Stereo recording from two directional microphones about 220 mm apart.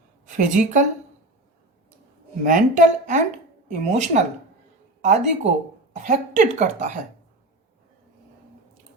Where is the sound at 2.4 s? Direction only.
35° right (ahead or behind).